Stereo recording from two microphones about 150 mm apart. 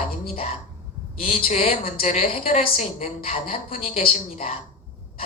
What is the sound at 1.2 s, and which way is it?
A woman's voice, 40° left (ahead or behind).